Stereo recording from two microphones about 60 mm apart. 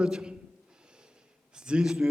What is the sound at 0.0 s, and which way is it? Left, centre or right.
Speech, centre.